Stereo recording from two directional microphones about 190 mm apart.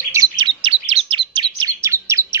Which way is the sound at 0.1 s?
20° right (ahead or behind).